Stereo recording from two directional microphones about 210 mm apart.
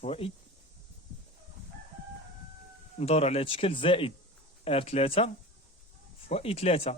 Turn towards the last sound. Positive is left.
turn(degrees=30)  # may be behind; listen again after turning